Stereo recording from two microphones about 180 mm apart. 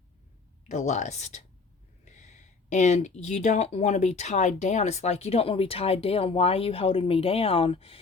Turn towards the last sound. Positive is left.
turn(degrees=30)  # may be behind; listen again after turning